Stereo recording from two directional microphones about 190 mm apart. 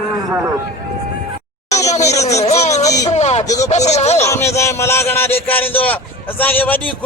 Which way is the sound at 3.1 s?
35° left (ahead or behind).